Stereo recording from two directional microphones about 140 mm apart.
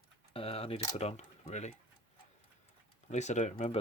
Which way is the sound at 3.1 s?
55° left (ahead or behind).